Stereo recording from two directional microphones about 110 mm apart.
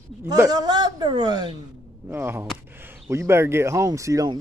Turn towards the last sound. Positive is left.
turn(degrees=-30)  # may be behind; listen again after turning